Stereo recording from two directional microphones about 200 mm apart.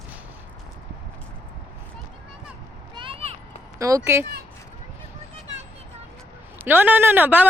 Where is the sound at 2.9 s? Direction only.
25° right (ahead or behind).